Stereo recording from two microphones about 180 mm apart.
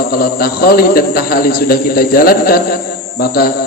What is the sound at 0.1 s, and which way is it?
A man's voice, 55° left (ahead or behind).